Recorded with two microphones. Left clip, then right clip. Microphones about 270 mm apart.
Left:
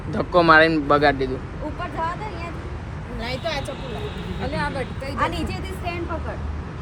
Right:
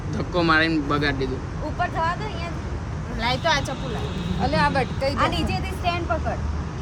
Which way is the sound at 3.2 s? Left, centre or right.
Centre.